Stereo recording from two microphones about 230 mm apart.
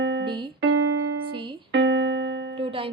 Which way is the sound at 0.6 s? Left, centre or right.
Right.